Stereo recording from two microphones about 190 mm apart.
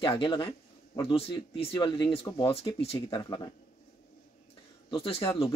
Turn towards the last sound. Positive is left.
turn(degrees=30)  # may be behind; listen again after turning